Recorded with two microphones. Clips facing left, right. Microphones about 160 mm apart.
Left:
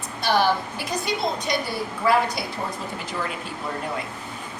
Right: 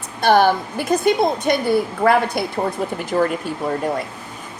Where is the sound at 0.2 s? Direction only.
50° right (ahead or behind).